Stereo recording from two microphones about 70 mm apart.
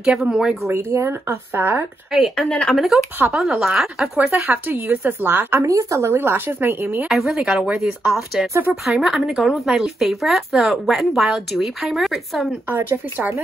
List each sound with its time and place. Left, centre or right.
0.0 s speech: centre
0.7 s speech: right
2.1 s speech: centre
4.3 s speech: right
5.6 s speech: right
7.1 s speech: centre